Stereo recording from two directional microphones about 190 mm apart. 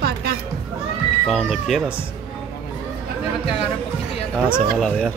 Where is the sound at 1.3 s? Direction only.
Centre (ahead or behind).